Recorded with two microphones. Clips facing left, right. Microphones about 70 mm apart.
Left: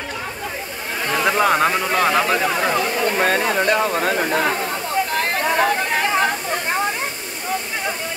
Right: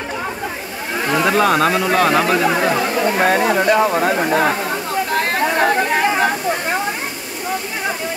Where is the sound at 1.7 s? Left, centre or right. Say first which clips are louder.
Right 3 dB; centre.